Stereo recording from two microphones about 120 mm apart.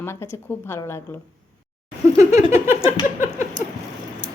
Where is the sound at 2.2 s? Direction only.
25° right (ahead or behind).